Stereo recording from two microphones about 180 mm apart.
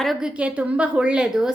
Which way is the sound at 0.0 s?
Centre (ahead or behind).